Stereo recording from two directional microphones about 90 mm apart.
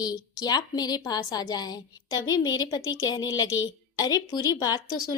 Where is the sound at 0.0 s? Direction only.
45° left (ahead or behind).